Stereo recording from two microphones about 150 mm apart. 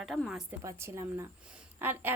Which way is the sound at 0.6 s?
20° right (ahead or behind).